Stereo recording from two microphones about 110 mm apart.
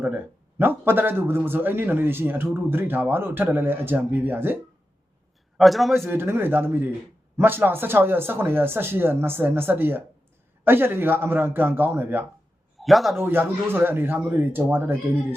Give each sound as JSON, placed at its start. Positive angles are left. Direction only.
{"t": 0.6, "sound": "speech", "side_deg": -20}
{"t": 5.5, "sound": "a man's voice", "side_deg": 0}
{"t": 6.1, "sound": "speech", "side_deg": -20}
{"t": 12.8, "sound": "a man's voice", "side_deg": 0}
{"t": 13.1, "sound": "speech", "side_deg": -20}